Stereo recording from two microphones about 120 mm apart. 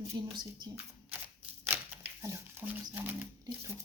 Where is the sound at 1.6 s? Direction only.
20° right (ahead or behind).